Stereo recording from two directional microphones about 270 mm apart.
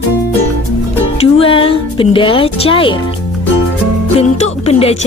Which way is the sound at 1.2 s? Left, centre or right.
Centre.